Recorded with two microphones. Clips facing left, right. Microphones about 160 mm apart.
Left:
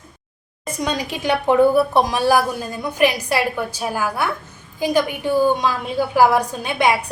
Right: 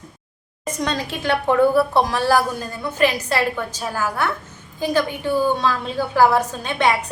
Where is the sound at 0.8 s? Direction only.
10° left (ahead or behind).